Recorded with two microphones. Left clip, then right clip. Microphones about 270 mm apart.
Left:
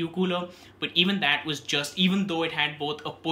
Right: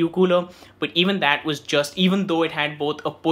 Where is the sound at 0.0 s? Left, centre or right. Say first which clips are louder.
Right 10 dB; centre.